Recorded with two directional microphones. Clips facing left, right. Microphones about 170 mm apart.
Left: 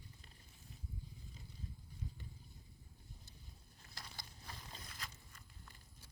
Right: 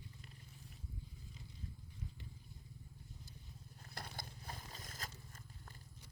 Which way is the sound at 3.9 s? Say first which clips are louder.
Right 6 dB; 55° right (ahead or behind).